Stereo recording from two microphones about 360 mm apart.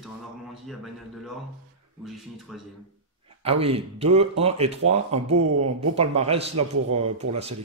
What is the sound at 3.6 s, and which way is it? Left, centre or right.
Speech, centre.